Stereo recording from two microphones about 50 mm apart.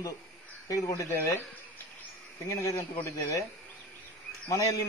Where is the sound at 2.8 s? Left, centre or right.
Left.